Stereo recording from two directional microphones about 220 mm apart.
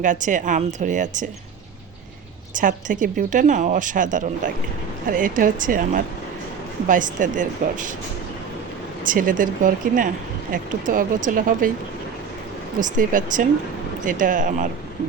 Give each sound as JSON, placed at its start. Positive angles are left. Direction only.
{"t": 0.0, "sound": "speech", "side_deg": -35}
{"t": 2.6, "sound": "speech", "side_deg": -35}
{"t": 9.0, "sound": "speech", "side_deg": -40}
{"t": 12.8, "sound": "speech", "side_deg": -35}